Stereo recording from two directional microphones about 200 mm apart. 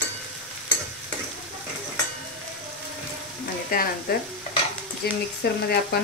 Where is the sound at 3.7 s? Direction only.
45° left (ahead or behind).